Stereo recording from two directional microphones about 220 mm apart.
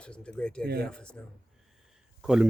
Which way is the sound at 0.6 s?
45° right (ahead or behind).